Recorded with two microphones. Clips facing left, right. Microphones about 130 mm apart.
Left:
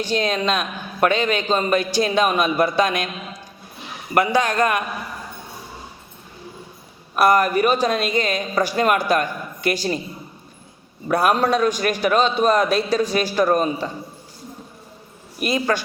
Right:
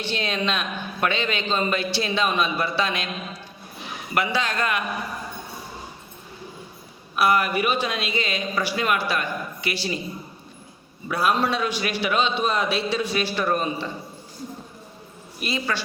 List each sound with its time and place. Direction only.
0.0 s speech: 40° left (ahead or behind)
4.1 s speech: 45° left (ahead or behind)
7.2 s speech: 40° left (ahead or behind)
11.1 s speech: 50° left (ahead or behind)
15.4 s speech: 45° left (ahead or behind)